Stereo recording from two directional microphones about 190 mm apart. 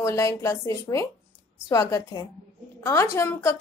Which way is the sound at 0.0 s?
15° left (ahead or behind).